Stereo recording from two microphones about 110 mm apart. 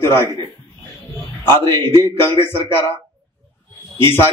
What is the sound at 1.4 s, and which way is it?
A man's voice, 20° left (ahead or behind).